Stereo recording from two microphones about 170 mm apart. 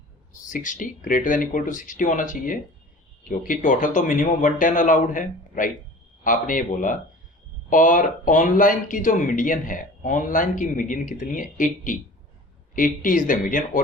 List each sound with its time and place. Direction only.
0.4 s speech: 50° left (ahead or behind)